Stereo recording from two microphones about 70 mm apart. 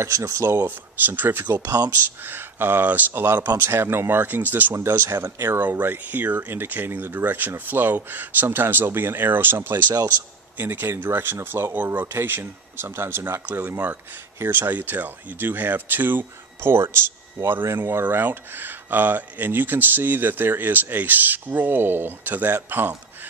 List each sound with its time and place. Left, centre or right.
0.0 s speech: right
0.7 s speech: right
4.7 s speech: right